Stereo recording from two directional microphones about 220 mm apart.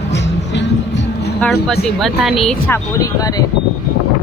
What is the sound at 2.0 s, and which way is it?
Speech, centre (ahead or behind).